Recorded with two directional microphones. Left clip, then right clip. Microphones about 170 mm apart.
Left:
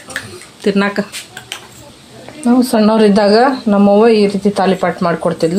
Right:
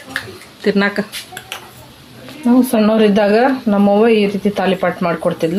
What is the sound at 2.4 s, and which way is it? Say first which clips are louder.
Speech: left 1 dB; 10° left (ahead or behind).